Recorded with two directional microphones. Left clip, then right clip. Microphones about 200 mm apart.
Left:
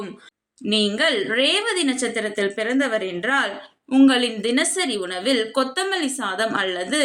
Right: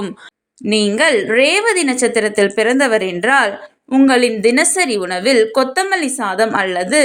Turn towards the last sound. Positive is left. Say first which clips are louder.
# right 7 dB
turn(degrees=-35)  # may be behind; listen again after turning